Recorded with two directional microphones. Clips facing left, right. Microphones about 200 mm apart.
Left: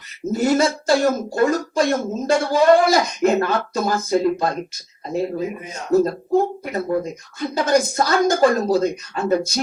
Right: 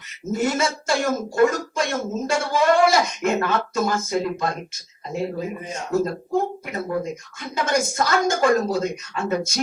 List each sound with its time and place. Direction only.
0.3 s speech: 35° left (ahead or behind)
5.9 s speech: 35° left (ahead or behind)